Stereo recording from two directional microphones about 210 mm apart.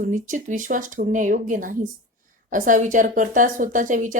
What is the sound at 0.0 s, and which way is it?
Speech, 40° right (ahead or behind).